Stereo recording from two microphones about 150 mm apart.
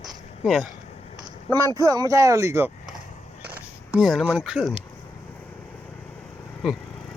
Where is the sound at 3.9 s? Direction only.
Centre (ahead or behind).